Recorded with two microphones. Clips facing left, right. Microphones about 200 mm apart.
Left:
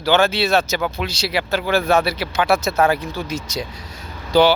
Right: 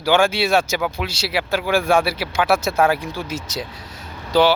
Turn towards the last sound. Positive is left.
turn(degrees=-5)  # may be behind; listen again after turning